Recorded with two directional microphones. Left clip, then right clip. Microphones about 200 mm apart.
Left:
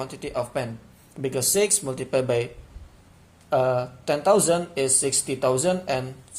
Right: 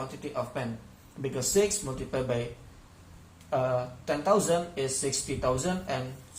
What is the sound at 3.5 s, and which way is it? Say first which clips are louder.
Speech: left 6 dB; 60° left (ahead or behind).